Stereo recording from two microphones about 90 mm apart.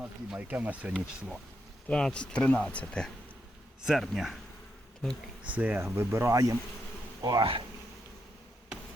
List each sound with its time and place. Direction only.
0.0 s speech: 15° right (ahead or behind)
1.9 s speech: 10° left (ahead or behind)
3.8 s speech: centre (ahead or behind)
5.5 s speech: 15° right (ahead or behind)
6.0 s speech: 30° right (ahead or behind); by 7.4 s 50° right (ahead or behind)